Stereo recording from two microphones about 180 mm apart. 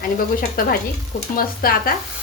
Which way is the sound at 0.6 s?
50° left (ahead or behind).